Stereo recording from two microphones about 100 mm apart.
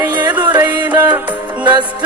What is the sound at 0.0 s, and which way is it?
Music, 15° right (ahead or behind).